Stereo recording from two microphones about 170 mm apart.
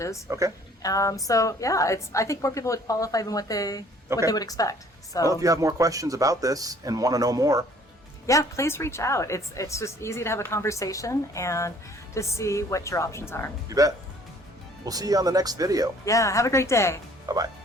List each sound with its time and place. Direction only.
0.3 s speech: 20° right (ahead or behind)
0.8 s a woman's voice: 20° left (ahead or behind)
5.3 s speech: 20° right (ahead or behind)
8.3 s a woman's voice: 15° left (ahead or behind)
13.7 s speech: 20° right (ahead or behind)
16.0 s a woman's voice: 20° left (ahead or behind)
17.3 s speech: 20° right (ahead or behind)